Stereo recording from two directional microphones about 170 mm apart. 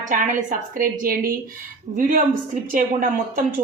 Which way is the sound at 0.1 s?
50° right (ahead or behind).